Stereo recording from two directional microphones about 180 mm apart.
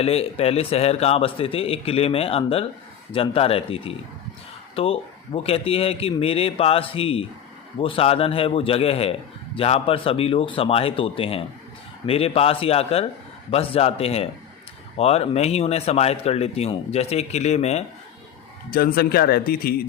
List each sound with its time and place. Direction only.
0.0 s speech: 35° left (ahead or behind)
18.7 s speech: 55° left (ahead or behind)